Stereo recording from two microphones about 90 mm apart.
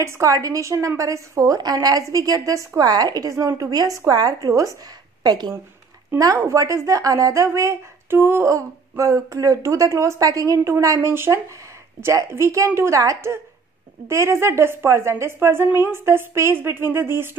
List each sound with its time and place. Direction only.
0.0 s speech: 35° right (ahead or behind)
5.2 s a woman's voice: 50° right (ahead or behind); by 17.3 s 25° right (ahead or behind)